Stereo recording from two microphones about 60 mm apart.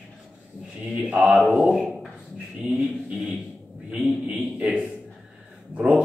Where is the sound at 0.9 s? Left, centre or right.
Centre.